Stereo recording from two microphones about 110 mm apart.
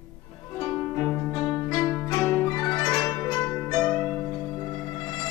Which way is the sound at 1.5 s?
30° left (ahead or behind).